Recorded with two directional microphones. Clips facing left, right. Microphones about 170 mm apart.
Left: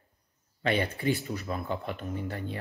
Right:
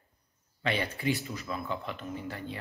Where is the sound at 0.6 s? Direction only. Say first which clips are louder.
Left 3 dB; 50° left (ahead or behind).